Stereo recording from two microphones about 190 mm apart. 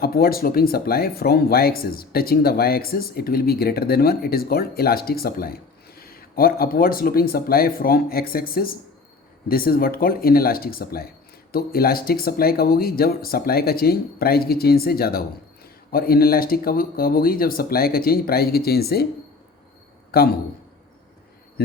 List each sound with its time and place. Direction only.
0.0 s speech: 50° left (ahead or behind)
20.1 s a man's voice: 55° left (ahead or behind)